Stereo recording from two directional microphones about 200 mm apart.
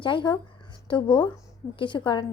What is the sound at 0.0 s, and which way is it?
A woman's voice, 25° left (ahead or behind).